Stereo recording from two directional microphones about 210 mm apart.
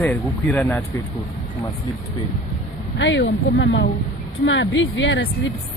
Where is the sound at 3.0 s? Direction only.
60° left (ahead or behind).